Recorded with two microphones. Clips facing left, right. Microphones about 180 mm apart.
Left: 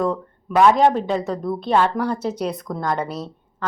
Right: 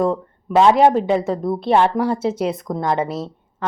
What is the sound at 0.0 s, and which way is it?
A woman's voice, 25° right (ahead or behind).